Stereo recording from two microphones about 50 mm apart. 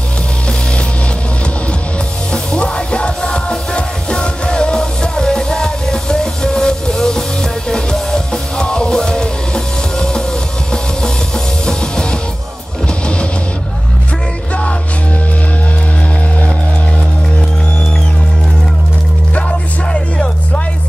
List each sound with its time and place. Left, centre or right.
2.3 s music: left
11.6 s music: centre
19.9 s music: left